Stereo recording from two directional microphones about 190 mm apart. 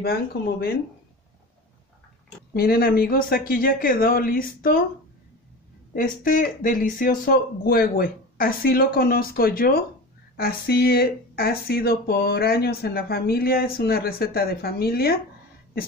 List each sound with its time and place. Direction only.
2.5 s speech: 50° left (ahead or behind)
5.9 s speech: 45° left (ahead or behind)